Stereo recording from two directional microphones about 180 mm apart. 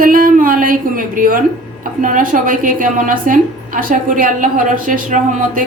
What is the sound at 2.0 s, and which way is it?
A woman's voice, 50° right (ahead or behind).